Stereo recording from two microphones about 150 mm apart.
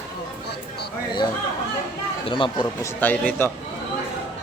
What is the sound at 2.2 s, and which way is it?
Speech, 35° left (ahead or behind).